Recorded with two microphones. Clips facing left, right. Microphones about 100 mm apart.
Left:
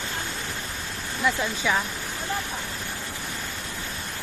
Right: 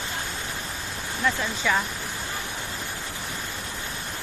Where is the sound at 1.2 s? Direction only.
5° left (ahead or behind).